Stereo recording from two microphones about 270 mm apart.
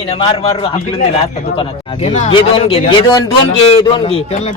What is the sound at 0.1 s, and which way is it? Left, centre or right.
Speech, centre.